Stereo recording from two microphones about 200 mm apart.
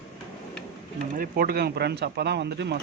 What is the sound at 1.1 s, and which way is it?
Speech, 45° right (ahead or behind).